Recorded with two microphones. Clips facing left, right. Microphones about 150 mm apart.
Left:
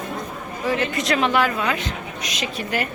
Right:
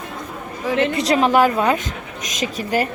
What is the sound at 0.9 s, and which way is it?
A woman's voice, 35° right (ahead or behind).